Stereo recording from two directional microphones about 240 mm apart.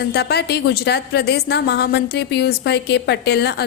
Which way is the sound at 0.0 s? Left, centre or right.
Left.